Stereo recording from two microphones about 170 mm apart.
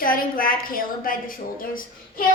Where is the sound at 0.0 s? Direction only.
55° left (ahead or behind).